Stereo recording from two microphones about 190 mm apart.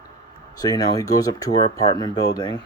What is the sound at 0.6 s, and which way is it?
Speech, 20° left (ahead or behind).